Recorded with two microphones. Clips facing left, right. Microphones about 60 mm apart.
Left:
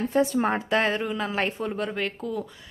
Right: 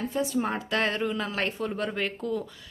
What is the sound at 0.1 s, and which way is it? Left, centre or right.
Speech, left.